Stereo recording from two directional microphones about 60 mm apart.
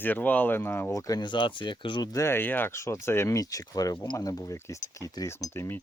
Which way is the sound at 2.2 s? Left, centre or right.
Left.